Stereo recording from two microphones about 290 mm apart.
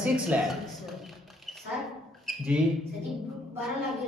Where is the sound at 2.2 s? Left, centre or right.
Centre.